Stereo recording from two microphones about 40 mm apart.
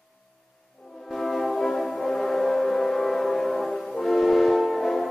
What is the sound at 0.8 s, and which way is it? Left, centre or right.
French horn, centre.